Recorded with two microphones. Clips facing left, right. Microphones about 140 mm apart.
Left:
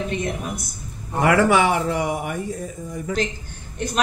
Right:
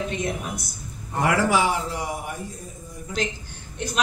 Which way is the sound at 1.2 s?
60° left (ahead or behind).